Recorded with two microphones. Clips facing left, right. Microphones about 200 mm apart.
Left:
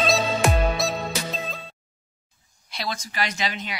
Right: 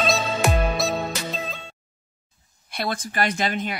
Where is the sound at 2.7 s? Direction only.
55° right (ahead or behind).